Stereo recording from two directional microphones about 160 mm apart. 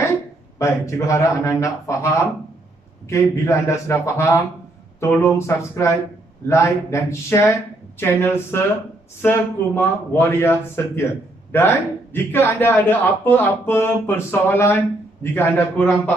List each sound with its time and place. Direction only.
0.6 s a man's voice: 20° left (ahead or behind)